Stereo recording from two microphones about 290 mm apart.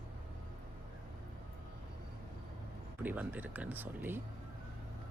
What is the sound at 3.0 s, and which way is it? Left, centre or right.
Speech, centre.